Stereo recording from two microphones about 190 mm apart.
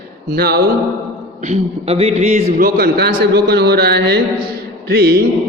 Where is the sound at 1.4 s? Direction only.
35° right (ahead or behind).